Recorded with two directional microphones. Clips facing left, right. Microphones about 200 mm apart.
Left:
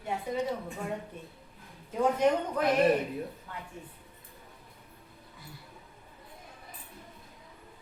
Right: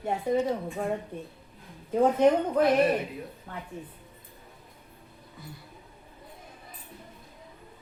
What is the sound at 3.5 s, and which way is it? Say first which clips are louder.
Speech: right 3 dB; 50° right (ahead or behind).